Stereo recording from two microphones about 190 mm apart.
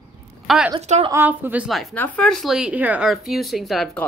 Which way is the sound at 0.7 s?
35° right (ahead or behind).